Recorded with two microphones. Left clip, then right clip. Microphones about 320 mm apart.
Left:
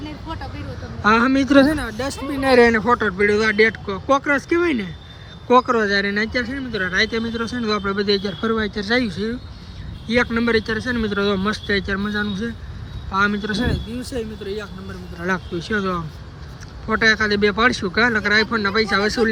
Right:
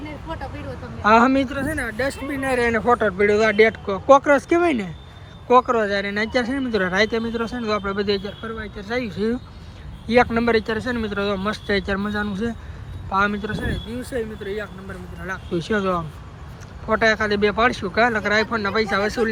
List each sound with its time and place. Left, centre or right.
1.0 s speech: centre
2.4 s speech: left
2.6 s speech: centre
15.5 s speech: centre